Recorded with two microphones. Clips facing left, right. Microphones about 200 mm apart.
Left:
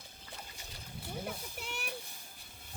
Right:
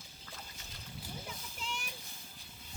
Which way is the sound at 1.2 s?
65° left (ahead or behind).